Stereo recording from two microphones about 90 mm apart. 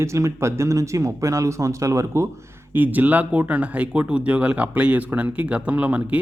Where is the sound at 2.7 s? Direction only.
20° right (ahead or behind).